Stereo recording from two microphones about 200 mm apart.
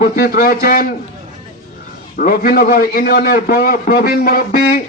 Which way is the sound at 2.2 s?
45° left (ahead or behind).